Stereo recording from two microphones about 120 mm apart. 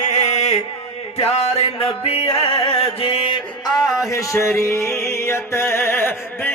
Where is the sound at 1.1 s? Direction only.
55° left (ahead or behind).